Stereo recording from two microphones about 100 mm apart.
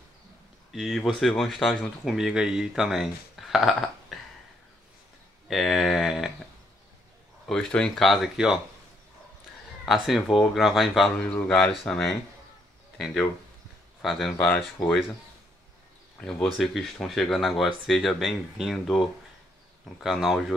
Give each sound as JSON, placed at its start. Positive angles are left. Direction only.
{"t": 0.7, "sound": "speech", "side_deg": -5}
{"t": 5.5, "sound": "a sound", "side_deg": 0}
{"t": 7.4, "sound": "speech", "side_deg": 5}
{"t": 9.8, "sound": "speech", "side_deg": 0}
{"t": 14.3, "sound": "speech", "side_deg": 20}
{"t": 16.2, "sound": "speech", "side_deg": 10}